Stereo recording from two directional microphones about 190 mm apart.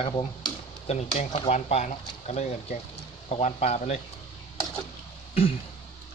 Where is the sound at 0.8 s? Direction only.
35° left (ahead or behind).